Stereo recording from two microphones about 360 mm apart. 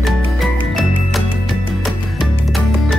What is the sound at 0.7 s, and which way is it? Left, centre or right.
Music, centre.